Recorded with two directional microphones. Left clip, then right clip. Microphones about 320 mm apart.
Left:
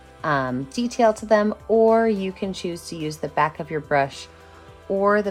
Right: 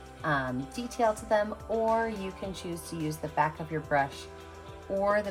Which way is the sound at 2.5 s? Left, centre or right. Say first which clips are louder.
Left 8 dB; left.